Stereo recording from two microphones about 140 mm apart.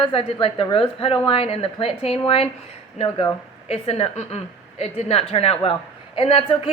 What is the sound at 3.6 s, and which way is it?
A woman's voice, 45° left (ahead or behind).